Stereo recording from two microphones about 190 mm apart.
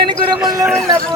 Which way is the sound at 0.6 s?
Centre (ahead or behind).